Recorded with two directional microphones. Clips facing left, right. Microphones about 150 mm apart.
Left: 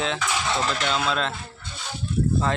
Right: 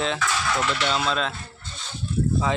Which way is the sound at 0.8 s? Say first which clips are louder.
Even; centre (ahead or behind).